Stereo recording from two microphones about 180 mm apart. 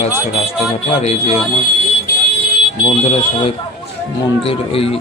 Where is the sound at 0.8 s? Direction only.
35° left (ahead or behind).